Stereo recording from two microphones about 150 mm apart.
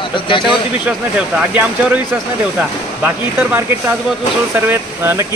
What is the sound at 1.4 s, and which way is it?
Speech, 10° right (ahead or behind).